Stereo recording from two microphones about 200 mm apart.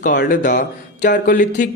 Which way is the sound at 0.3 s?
40° left (ahead or behind).